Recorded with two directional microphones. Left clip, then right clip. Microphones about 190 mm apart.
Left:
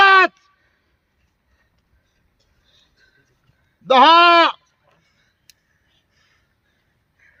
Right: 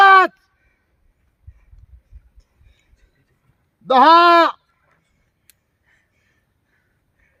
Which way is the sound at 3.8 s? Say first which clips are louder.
Even; 65° right (ahead or behind).